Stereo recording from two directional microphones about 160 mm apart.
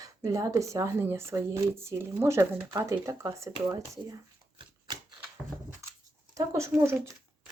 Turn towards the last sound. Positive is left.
turn(degrees=-15)  # may be behind; listen again after turning